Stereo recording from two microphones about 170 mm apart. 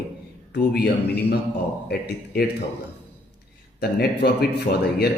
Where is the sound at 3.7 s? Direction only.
70° left (ahead or behind).